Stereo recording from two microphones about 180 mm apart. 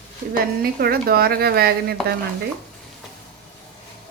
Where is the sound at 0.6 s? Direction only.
55° right (ahead or behind).